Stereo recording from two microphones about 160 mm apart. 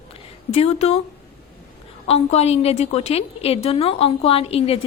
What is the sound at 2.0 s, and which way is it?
A woman's voice, 40° left (ahead or behind).